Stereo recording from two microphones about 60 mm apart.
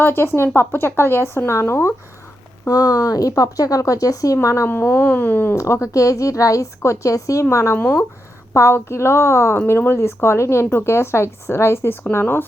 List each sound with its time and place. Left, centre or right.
0.0 s speech: left
2.6 s speech: left
4.7 s speech: left
5.5 s a woman's voice: left
5.9 s a woman's voice: left